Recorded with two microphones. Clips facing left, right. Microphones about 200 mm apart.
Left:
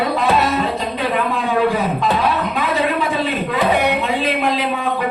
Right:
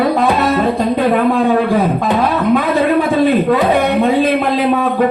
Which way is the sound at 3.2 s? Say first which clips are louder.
Right 10 dB; 55° right (ahead or behind).